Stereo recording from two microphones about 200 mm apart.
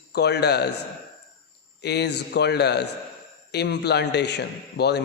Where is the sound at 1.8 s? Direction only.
55° left (ahead or behind).